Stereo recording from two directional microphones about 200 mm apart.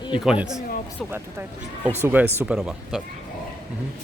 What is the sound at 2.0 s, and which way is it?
Speech, 10° right (ahead or behind).